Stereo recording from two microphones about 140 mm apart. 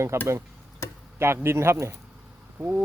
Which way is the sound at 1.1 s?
20° right (ahead or behind).